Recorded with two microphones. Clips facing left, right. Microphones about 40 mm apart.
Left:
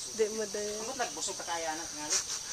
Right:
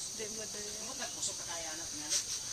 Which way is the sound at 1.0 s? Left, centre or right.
Left.